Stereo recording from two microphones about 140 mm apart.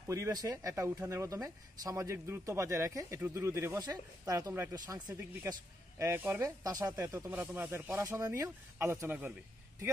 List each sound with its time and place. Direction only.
0.1 s speech: 25° right (ahead or behind)
5.5 s speech: 20° right (ahead or behind)